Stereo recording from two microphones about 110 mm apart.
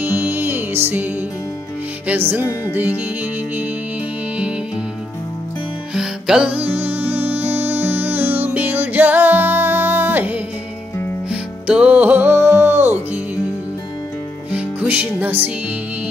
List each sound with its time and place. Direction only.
0.0 s music: 15° right (ahead or behind)
5.9 s music: 5° right (ahead or behind)
14.5 s music: 10° right (ahead or behind)